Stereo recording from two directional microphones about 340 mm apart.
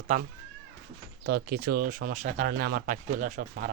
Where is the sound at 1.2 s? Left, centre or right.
Right.